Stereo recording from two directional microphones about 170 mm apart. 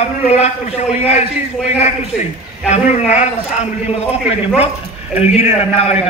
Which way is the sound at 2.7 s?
40° left (ahead or behind).